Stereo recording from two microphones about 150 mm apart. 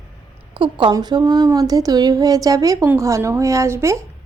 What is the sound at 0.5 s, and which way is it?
A woman's voice, 35° right (ahead or behind).